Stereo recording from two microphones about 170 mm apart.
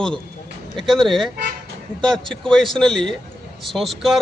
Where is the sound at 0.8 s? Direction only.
Centre (ahead or behind).